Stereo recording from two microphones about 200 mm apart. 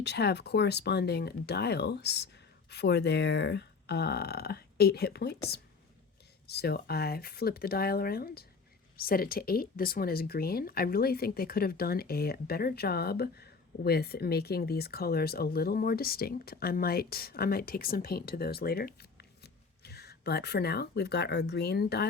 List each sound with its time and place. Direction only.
0.0 s speech: 55° left (ahead or behind)